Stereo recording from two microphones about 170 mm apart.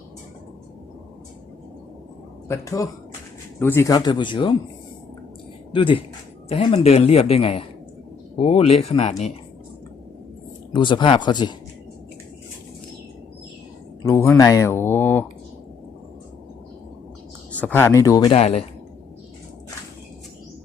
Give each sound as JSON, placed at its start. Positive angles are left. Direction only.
{"t": 2.5, "sound": "speech", "side_deg": 20}
{"t": 5.7, "sound": "speech", "side_deg": 30}
{"t": 10.7, "sound": "speech", "side_deg": 25}
{"t": 14.0, "sound": "speech", "side_deg": 15}
{"t": 17.5, "sound": "speech", "side_deg": 10}
{"t": 18.3, "sound": "speech", "side_deg": 35}